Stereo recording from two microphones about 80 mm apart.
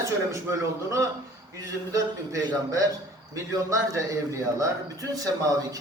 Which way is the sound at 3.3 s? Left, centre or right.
Right.